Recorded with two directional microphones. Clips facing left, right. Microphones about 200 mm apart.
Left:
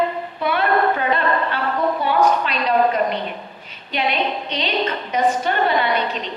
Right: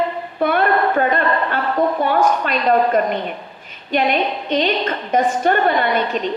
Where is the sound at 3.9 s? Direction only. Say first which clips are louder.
Right 4 dB; 50° right (ahead or behind).